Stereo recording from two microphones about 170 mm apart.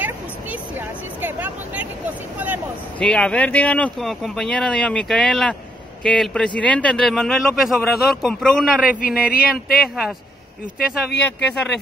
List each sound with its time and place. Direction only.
0.0 s a sound: 10° right (ahead or behind)
2.3 s speech: 10° right (ahead or behind)
3.0 s a man's voice: 5° left (ahead or behind)
9.0 s speech: 55° left (ahead or behind)
11.1 s speech: 90° left